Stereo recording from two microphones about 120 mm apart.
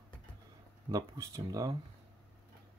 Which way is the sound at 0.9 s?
30° right (ahead or behind).